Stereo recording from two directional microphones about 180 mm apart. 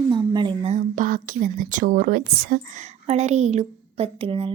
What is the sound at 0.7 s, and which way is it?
A woman's voice, 45° right (ahead or behind).